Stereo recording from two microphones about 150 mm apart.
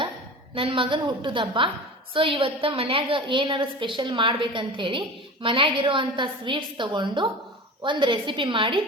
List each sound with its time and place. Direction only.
0.5 s a woman's voice: 35° right (ahead or behind)